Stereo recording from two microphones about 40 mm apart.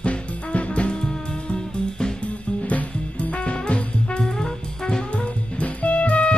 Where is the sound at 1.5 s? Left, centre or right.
Left.